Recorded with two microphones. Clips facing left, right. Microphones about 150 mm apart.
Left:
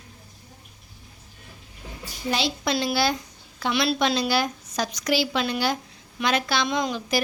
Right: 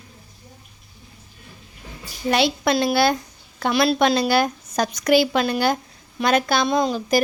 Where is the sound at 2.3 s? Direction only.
60° right (ahead or behind); by 6.7 s 45° right (ahead or behind).